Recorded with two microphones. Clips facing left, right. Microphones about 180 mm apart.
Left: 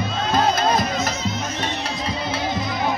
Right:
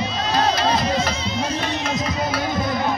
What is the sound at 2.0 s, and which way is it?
Music, 25° left (ahead or behind).